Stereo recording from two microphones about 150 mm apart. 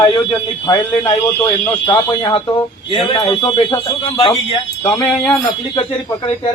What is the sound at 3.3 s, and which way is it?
Speech, 20° left (ahead or behind).